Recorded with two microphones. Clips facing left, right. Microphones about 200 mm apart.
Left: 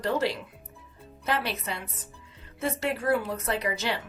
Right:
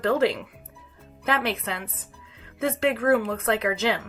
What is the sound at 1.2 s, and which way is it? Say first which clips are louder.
Speech: right 4 dB; 55° right (ahead or behind).